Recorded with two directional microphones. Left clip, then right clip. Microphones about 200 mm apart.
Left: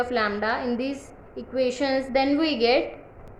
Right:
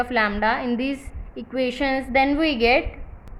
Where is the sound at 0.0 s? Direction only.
35° right (ahead or behind).